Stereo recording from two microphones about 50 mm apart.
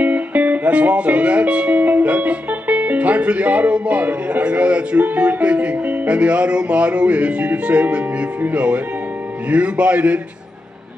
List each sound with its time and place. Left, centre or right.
0.0 s speech: right